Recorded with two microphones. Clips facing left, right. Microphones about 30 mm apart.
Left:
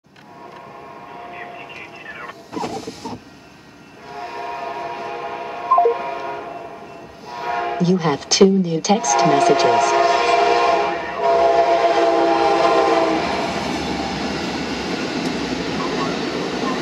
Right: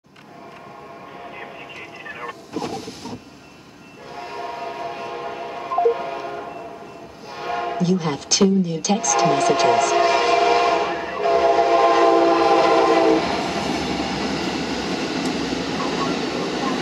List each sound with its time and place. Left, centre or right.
2.1 s vehicle: centre
4.1 s train: centre
7.2 s speech: centre
10.0 s train: centre